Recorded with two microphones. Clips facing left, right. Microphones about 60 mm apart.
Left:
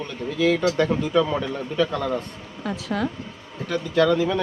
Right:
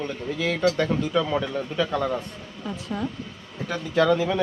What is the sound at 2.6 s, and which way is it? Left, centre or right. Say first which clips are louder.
Speech: left 4 dB; left.